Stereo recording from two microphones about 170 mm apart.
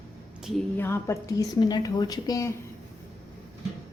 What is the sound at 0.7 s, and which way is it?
A woman's voice, 15° left (ahead or behind).